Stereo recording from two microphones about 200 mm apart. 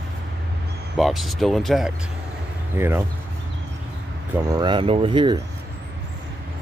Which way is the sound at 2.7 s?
10° right (ahead or behind).